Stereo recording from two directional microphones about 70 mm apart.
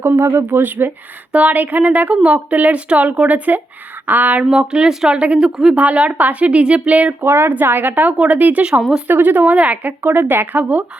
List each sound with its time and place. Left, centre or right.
0.0 s a woman's voice: right
4.5 s a woman's voice: centre
7.2 s a woman's voice: right